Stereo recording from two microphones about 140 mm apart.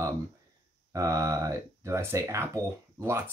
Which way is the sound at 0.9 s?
20° right (ahead or behind).